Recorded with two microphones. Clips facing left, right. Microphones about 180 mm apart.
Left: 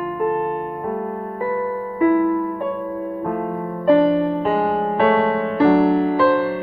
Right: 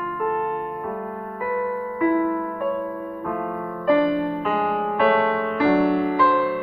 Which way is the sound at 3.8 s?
30° left (ahead or behind).